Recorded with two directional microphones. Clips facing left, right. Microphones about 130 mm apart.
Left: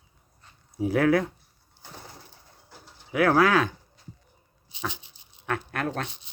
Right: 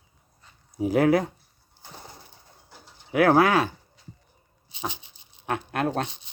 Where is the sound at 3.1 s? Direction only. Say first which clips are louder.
Right 3 dB; 60° right (ahead or behind).